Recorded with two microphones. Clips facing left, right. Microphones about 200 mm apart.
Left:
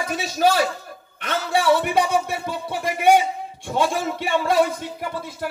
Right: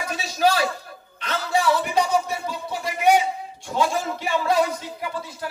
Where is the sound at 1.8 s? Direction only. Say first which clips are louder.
Left 1 dB; 55° left (ahead or behind).